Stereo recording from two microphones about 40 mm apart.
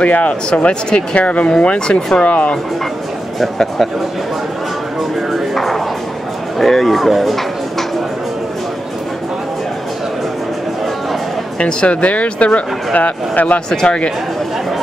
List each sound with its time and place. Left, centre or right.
0.0 s speech: left
0.5 s speech: left
3.3 s speech: centre
5.3 s music: centre
6.6 s speech: centre
11.6 s speech: left